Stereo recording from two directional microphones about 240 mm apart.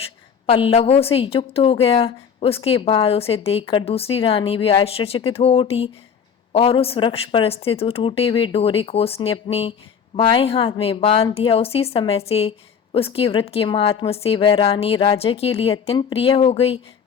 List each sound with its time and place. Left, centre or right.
0.4 s a woman's voice: left